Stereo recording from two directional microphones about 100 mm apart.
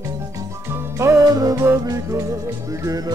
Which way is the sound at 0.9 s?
30° right (ahead or behind).